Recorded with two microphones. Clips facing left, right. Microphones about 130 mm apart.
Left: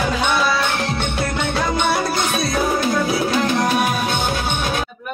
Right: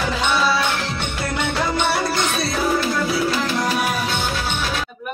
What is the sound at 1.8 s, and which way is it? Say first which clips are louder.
Music: left 1 dB; 15° left (ahead or behind).